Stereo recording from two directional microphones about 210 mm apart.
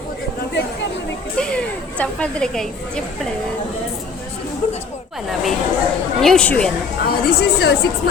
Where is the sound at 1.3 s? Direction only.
5° left (ahead or behind).